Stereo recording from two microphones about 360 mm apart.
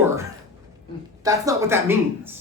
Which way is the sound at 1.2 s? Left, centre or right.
Centre.